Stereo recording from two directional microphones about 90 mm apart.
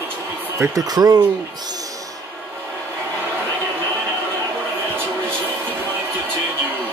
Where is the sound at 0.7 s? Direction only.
45° right (ahead or behind).